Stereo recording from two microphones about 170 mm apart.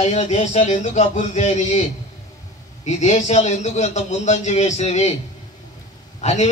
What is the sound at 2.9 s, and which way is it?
A man's voice, 40° left (ahead or behind).